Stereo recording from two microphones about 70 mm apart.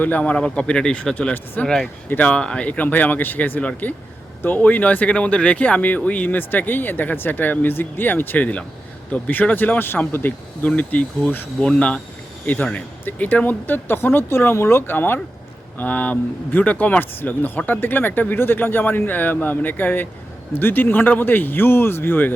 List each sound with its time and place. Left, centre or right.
0.0 s speech: left
2.0 s speech: centre
13.1 s speech: left